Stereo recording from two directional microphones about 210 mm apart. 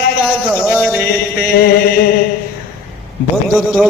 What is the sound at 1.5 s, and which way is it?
Music, 50° left (ahead or behind).